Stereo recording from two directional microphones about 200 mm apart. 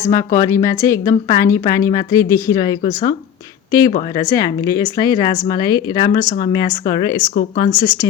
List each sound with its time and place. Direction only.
0.0 s a woman's voice: 15° left (ahead or behind)